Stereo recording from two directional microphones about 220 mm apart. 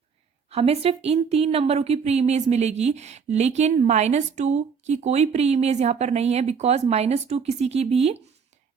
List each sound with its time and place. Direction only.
0.5 s a woman's voice: 25° right (ahead or behind)